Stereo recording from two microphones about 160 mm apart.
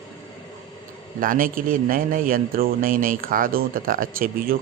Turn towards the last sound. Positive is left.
turn(degrees=-65)  # may be behind; listen again after turning